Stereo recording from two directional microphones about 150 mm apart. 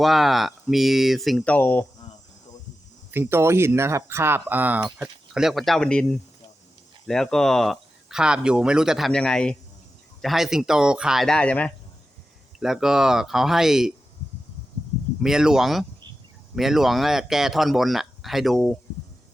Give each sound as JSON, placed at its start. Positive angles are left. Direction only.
{"t": 0.0, "sound": "speech", "side_deg": 0}
{"t": 3.1, "sound": "speech", "side_deg": -15}
{"t": 12.5, "sound": "speech", "side_deg": -5}
{"t": 15.2, "sound": "speech", "side_deg": -5}